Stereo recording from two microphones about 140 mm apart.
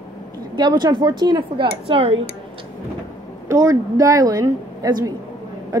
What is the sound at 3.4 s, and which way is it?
A woman's voice, 25° right (ahead or behind).